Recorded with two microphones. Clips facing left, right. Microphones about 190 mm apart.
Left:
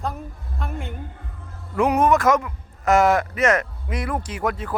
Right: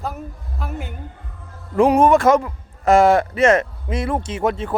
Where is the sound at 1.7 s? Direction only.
30° right (ahead or behind).